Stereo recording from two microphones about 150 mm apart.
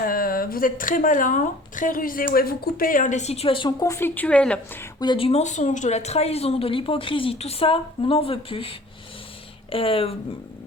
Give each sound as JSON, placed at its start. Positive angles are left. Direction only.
{"t": 0.0, "sound": "speech", "side_deg": 75}
{"t": 4.9, "sound": "a woman's voice", "side_deg": 35}
{"t": 9.7, "sound": "a woman's voice", "side_deg": 40}